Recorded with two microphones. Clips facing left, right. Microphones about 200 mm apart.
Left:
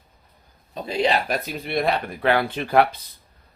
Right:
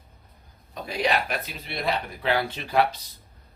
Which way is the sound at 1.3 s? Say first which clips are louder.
Left 7 dB; 45° left (ahead or behind).